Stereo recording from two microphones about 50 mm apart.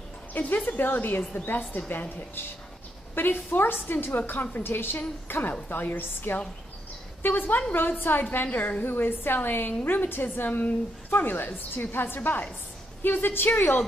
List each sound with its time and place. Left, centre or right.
0.3 s a woman's voice: left
8.5 s a woman's voice: left